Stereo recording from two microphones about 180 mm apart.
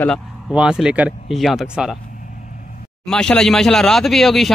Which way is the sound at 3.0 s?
5° left (ahead or behind).